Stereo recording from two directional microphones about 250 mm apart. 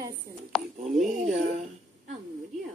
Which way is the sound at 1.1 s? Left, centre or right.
Right.